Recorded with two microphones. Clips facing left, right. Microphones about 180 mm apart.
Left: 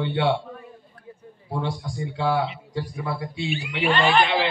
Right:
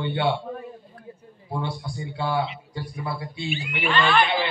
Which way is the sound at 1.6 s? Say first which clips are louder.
Left 2 dB; 90° left.